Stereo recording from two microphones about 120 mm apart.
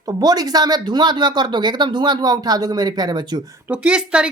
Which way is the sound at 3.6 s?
10° right (ahead or behind).